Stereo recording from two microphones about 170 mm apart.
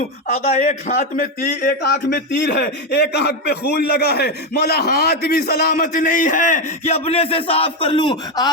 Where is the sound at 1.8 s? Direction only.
80° left.